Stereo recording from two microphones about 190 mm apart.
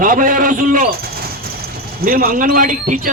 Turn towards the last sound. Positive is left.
turn(degrees=-45)  # may be behind; listen again after turning